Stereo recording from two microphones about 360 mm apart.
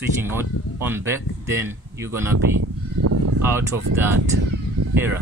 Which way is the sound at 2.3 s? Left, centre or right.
Right.